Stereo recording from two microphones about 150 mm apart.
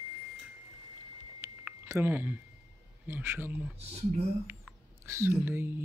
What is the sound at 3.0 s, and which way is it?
Speech, 15° right (ahead or behind).